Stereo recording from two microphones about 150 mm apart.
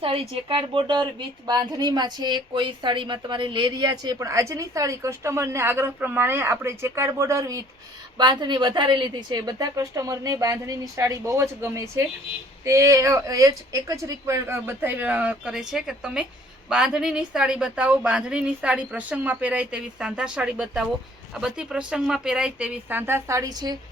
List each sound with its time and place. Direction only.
0.0 s a woman's voice: 35° right (ahead or behind)